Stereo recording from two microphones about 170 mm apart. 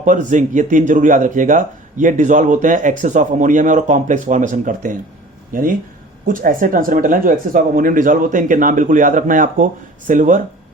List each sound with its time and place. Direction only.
0.0 s speech: 45° right (ahead or behind)